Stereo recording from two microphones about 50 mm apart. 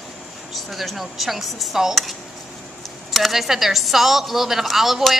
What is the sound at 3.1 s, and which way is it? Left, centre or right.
A woman's voice, centre.